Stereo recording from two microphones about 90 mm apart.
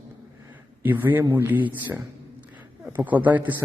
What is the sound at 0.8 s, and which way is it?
Speech, 20° right (ahead or behind).